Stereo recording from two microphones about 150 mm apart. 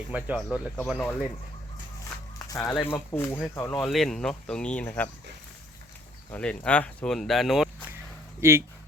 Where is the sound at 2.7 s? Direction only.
15° left (ahead or behind).